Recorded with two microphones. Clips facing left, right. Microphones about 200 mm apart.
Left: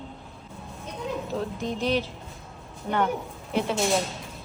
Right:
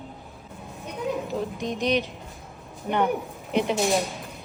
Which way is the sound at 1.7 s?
15° right (ahead or behind).